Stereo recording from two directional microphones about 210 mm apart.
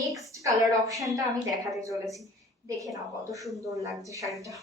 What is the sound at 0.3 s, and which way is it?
A woman's voice, 15° right (ahead or behind).